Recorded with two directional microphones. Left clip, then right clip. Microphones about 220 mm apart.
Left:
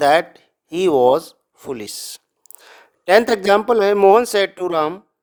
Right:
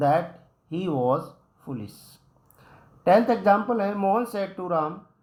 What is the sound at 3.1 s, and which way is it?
Speech, 45° left (ahead or behind).